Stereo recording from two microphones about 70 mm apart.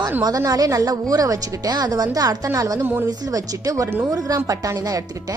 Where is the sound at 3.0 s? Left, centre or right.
Right.